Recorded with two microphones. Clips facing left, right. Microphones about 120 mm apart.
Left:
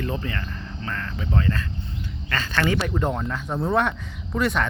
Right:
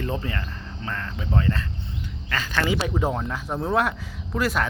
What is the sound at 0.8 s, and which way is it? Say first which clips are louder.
Speech: even; 20° right (ahead or behind).